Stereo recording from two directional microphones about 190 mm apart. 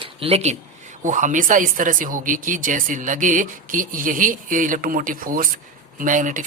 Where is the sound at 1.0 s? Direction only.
40° right (ahead or behind).